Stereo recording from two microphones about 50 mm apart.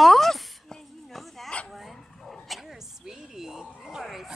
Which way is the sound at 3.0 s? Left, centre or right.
Centre.